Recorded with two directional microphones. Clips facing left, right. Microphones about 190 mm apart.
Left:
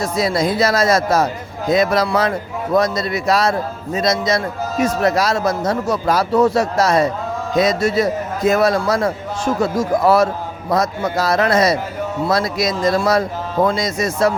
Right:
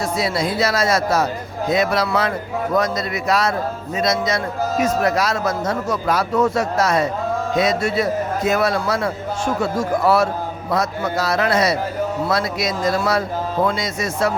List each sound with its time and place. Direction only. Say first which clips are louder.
0.0 s a man's voice: left 3 dB; 45° left (ahead or behind)